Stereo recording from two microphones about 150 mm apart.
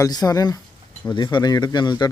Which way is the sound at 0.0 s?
25° left (ahead or behind).